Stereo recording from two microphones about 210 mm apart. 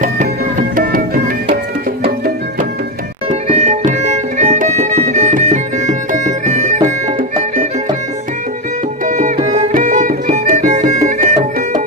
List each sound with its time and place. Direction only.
0.8 s music: 45° right (ahead or behind)
3.2 s music: 35° right (ahead or behind)
9.0 s music: 40° right (ahead or behind)